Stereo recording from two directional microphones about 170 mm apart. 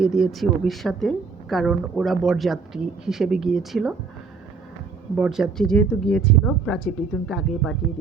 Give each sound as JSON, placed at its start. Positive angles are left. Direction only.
{"t": 0.0, "sound": "speech", "side_deg": 0}
{"t": 5.1, "sound": "speech", "side_deg": -5}